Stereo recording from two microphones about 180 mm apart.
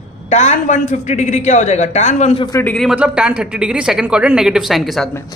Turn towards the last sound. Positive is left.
turn(degrees=0)  # may be behind; listen again after turning